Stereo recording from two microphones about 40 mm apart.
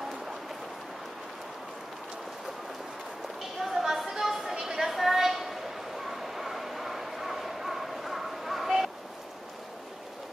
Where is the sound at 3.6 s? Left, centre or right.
Centre.